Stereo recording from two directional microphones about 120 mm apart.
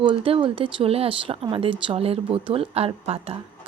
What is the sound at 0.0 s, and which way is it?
Speech, 45° right (ahead or behind).